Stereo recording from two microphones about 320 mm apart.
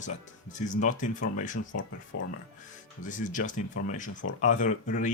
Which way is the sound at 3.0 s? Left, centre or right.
Left.